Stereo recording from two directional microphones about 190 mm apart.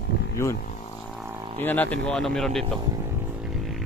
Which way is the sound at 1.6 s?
10° left (ahead or behind).